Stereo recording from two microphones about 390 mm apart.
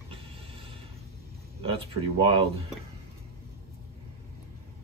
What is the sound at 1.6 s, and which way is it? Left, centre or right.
Speech, centre.